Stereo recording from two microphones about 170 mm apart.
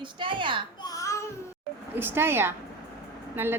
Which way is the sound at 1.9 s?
10° right (ahead or behind).